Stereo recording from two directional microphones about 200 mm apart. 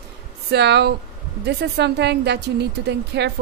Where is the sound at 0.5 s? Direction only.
55° right (ahead or behind).